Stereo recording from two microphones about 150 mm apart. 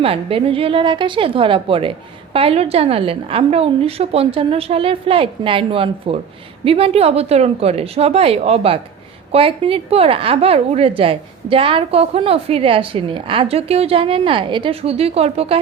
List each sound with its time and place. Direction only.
0.0 s a woman's voice: 40° right (ahead or behind)